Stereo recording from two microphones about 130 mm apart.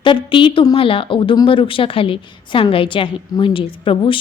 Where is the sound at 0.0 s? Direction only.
40° left (ahead or behind).